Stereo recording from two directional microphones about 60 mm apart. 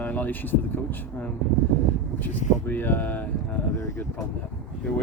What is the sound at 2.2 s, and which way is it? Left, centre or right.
Speech, left.